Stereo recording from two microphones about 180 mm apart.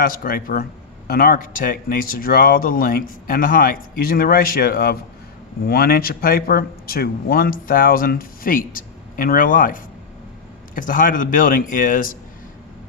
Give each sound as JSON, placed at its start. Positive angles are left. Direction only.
{"t": 0.0, "sound": "speech", "side_deg": 50}